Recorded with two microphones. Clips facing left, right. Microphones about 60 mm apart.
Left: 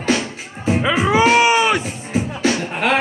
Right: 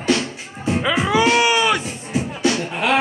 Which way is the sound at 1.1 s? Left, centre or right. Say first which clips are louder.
Left 3 dB; left.